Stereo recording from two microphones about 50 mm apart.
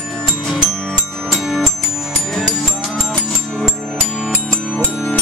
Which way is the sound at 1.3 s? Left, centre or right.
Centre.